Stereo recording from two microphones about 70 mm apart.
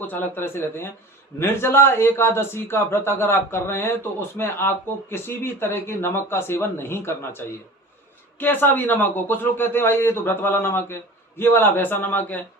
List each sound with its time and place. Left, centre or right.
0.1 s a man's voice: left